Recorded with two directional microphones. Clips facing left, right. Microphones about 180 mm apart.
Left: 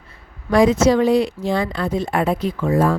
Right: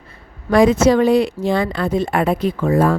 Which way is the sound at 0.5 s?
60° right (ahead or behind).